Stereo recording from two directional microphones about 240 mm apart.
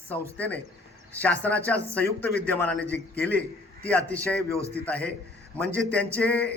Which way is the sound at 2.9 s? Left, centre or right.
Left.